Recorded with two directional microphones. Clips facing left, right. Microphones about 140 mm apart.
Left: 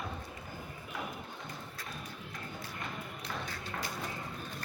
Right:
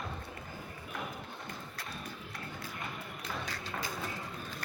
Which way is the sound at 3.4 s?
90° right.